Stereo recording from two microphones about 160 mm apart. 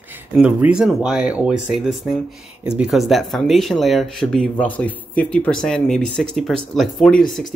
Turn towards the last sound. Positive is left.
turn(degrees=5)  # may be behind; listen again after turning